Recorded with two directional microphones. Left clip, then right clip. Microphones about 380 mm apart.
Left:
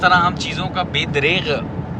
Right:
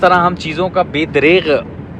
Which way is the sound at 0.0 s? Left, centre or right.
Centre.